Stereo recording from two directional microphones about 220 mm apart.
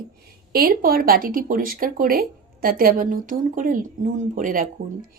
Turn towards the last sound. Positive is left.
turn(degrees=-40)  # may be behind; listen again after turning